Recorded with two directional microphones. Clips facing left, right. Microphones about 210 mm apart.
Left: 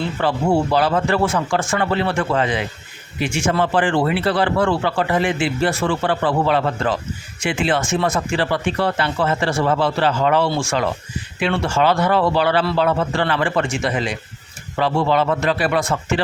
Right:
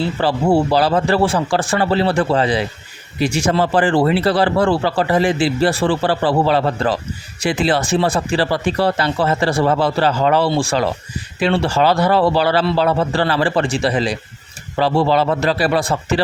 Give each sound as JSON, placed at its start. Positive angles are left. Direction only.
{"t": 0.2, "sound": "a man's voice", "side_deg": -35}